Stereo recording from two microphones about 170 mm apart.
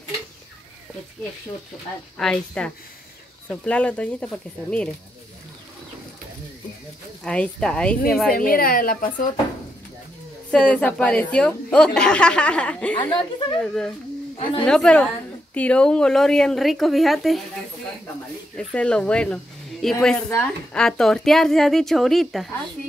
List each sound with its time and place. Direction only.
2.1 s a woman's voice: 5° left (ahead or behind)
7.2 s a woman's voice: 5° left (ahead or behind)
8.3 s a woman's voice: 60° left (ahead or behind)
10.5 s a woman's voice: 5° left (ahead or behind)
14.3 s a sound: 30° left (ahead or behind)
14.6 s a woman's voice: 5° left (ahead or behind)
18.6 s a woman's voice: 5° left (ahead or behind)